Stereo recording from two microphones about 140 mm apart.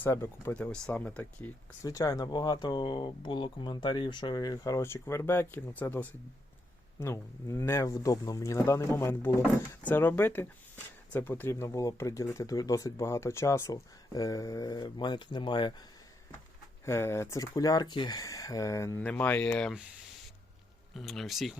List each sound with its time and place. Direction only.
0.0 s speech: 20° left (ahead or behind)
1.8 s speech: 25° left (ahead or behind)
16.8 s speech: 20° left (ahead or behind)
18.9 s speech: 10° left (ahead or behind)
20.9 s speech: centre (ahead or behind)